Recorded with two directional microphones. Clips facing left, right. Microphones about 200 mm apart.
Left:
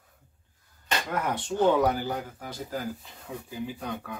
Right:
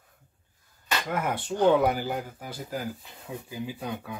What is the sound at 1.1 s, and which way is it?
Speech, 10° right (ahead or behind).